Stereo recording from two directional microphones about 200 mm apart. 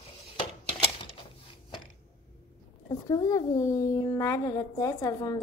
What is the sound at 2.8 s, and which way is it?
Speech, 15° left (ahead or behind).